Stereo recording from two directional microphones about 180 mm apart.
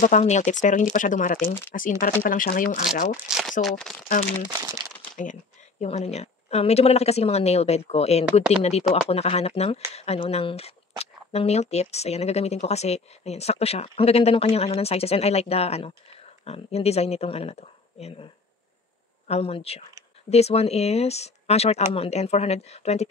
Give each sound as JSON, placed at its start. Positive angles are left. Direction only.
{"t": 0.0, "sound": "speech", "side_deg": 40}
{"t": 3.3, "sound": "speech", "side_deg": -5}
{"t": 4.1, "sound": "speech", "side_deg": 45}
{"t": 19.2, "sound": "speech", "side_deg": 35}